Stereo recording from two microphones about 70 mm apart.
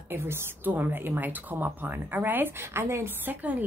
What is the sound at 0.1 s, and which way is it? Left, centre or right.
A woman's voice, right.